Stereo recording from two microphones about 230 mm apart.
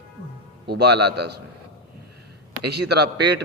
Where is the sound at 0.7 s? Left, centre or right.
Right.